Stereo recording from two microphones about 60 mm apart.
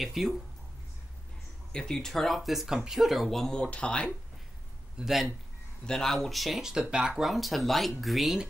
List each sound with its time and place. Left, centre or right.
0.0 s speech: centre
1.7 s speech: centre
3.5 s speech: centre
4.9 s speech: centre
5.9 s speech: centre
7.2 s speech: centre